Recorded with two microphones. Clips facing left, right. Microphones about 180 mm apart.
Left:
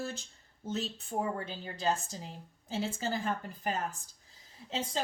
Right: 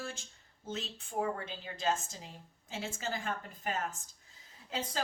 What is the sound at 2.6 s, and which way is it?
Speech, 35° left (ahead or behind).